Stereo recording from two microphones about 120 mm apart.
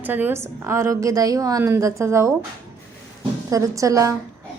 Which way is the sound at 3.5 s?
25° right (ahead or behind).